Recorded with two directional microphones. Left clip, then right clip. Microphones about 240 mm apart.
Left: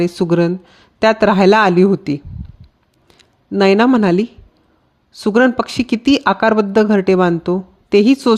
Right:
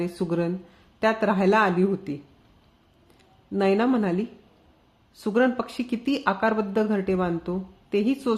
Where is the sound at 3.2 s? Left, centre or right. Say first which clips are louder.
Left 11 dB; left.